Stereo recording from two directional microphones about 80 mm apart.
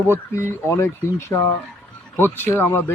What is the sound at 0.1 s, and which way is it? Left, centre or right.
Speech, left.